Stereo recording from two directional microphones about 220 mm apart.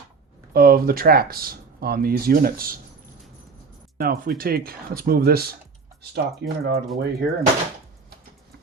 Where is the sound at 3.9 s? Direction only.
40° right (ahead or behind).